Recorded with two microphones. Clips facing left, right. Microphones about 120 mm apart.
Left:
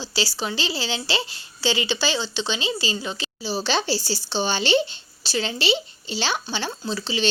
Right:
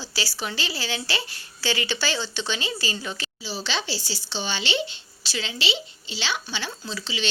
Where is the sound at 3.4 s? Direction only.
40° left (ahead or behind).